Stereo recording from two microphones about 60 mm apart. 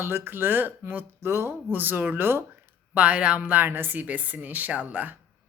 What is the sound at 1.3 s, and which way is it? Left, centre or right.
Speech, right.